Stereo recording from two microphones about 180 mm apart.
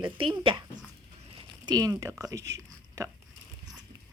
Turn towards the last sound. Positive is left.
turn(degrees=-15)  # may be behind; listen again after turning